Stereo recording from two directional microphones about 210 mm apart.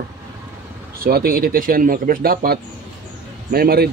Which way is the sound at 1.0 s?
45° right (ahead or behind).